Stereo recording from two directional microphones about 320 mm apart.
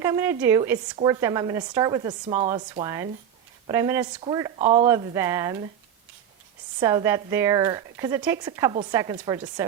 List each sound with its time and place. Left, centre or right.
0.0 s speech: centre
4.9 s speech: centre
6.7 s speech: centre